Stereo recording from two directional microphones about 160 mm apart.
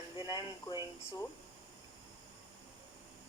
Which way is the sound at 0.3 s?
30° left (ahead or behind).